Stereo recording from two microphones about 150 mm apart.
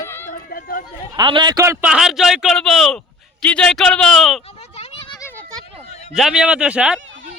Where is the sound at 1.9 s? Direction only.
5° right (ahead or behind).